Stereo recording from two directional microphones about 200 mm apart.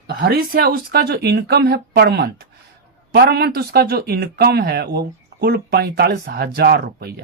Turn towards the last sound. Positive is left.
turn(degrees=-55)  # may be behind; listen again after turning